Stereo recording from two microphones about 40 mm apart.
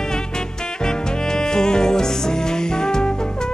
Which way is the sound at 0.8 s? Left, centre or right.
Centre.